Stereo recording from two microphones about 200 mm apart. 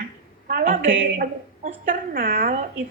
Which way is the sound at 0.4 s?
45° right (ahead or behind).